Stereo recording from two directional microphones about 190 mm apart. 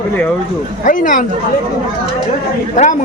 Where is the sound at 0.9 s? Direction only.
45° left (ahead or behind).